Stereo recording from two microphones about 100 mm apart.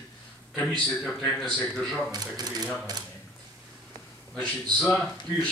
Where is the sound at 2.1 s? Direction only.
40° right (ahead or behind).